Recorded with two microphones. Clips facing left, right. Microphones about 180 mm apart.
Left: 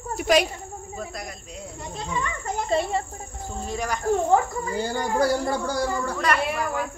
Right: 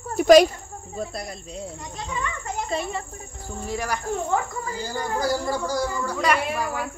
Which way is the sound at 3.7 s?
10° right (ahead or behind).